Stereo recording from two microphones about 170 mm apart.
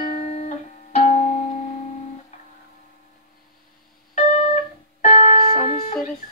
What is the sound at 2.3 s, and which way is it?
Music, 45° left (ahead or behind).